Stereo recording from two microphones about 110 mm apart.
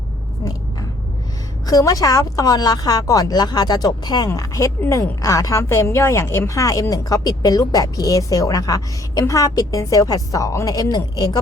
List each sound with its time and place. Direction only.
0.4 s vehicle: 30° left (ahead or behind)
1.6 s a woman's voice: 35° left (ahead or behind)
4.3 s a woman's voice: 30° left (ahead or behind)